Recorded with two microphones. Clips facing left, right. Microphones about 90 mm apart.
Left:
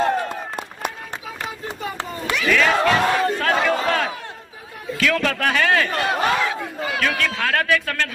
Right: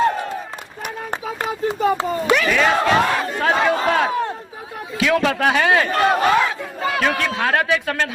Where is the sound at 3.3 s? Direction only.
15° right (ahead or behind).